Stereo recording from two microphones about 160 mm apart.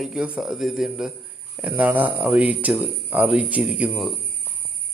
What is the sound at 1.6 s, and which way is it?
Speech, 10° right (ahead or behind).